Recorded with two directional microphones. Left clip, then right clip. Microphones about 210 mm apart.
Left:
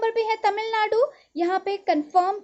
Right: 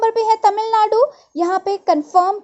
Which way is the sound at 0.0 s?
20° right (ahead or behind).